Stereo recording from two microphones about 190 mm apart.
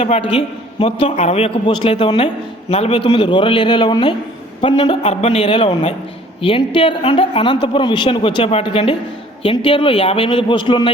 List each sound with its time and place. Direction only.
0.0 s a man's voice: 30° left (ahead or behind)